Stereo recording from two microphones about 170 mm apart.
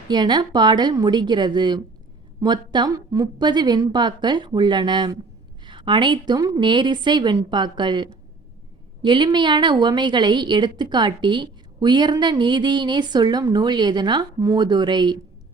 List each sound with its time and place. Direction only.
0.1 s a woman's voice: 25° right (ahead or behind)